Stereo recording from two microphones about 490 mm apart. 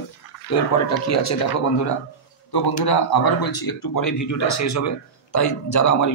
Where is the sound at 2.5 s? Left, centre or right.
Left.